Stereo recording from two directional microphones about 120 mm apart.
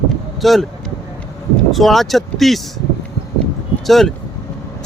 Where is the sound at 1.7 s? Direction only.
Centre (ahead or behind).